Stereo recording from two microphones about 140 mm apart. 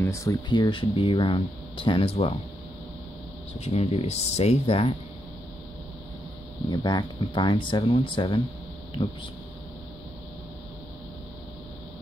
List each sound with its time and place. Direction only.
0.0 s speech: 20° left (ahead or behind); by 2.3 s 40° left (ahead or behind)
3.6 s speech: 50° left (ahead or behind)
6.7 s speech: 30° left (ahead or behind)